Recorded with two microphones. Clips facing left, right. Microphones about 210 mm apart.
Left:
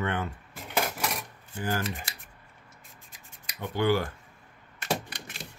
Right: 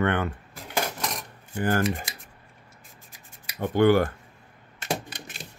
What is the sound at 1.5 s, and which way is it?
Speech, 55° right (ahead or behind).